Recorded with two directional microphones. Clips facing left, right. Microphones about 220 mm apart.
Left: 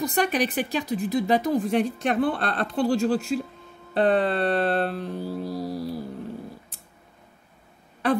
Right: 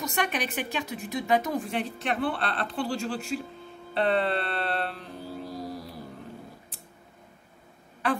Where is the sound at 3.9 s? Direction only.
45° left (ahead or behind).